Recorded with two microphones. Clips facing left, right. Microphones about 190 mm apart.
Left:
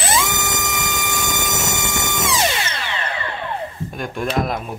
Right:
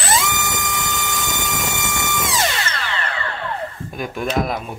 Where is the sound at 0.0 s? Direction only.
20° left (ahead or behind).